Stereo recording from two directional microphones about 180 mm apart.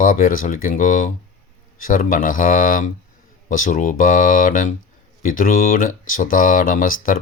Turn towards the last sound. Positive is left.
turn(degrees=50)  # may be behind; listen again after turning